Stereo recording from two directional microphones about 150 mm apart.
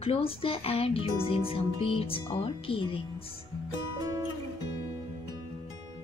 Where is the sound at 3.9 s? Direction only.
25° right (ahead or behind).